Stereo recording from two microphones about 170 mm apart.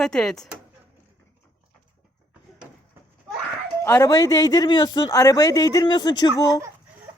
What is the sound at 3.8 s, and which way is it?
A man's voice, 15° left (ahead or behind).